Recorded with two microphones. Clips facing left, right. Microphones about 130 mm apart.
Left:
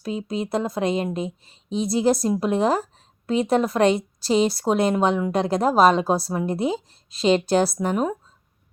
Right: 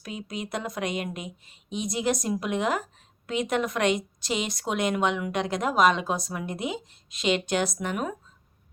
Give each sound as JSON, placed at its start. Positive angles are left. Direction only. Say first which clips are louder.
{"t": 0.0, "sound": "speech", "louder": "left 8 dB", "side_deg": 30}